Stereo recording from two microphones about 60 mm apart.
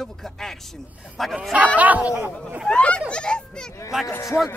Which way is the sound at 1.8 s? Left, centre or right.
Right.